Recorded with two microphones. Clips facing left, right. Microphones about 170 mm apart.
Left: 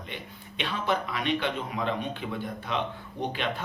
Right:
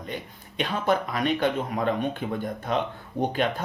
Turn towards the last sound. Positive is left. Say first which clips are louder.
# right 4 dB
turn(degrees=-45)  # may be behind; listen again after turning